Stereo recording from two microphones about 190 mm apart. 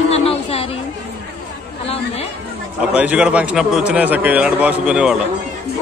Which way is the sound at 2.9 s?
5° right (ahead or behind).